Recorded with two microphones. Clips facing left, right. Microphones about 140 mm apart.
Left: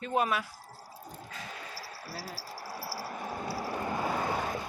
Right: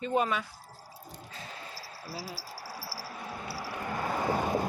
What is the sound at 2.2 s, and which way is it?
Speech, 10° right (ahead or behind).